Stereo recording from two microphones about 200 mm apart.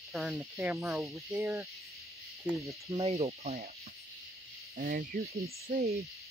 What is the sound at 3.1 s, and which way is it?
Speech, 30° right (ahead or behind).